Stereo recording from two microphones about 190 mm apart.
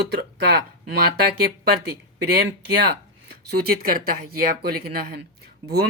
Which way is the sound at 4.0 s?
50° right (ahead or behind).